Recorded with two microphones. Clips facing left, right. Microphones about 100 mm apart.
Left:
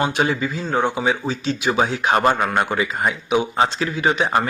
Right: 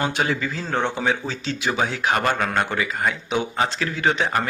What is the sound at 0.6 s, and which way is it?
Speech, 5° left (ahead or behind).